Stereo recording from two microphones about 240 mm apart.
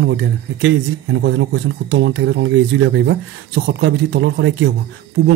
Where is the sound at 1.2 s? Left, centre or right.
Right.